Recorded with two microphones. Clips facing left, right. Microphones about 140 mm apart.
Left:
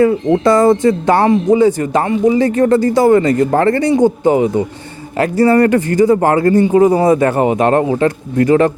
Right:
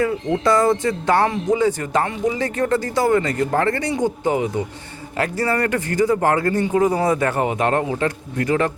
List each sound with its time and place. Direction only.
0.0 s speech: 25° left (ahead or behind)